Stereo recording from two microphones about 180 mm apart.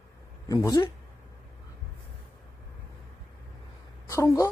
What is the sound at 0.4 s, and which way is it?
Speech, 20° left (ahead or behind).